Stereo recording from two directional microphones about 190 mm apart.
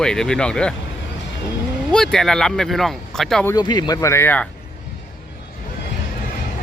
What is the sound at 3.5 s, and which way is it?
Speech, 20° left (ahead or behind).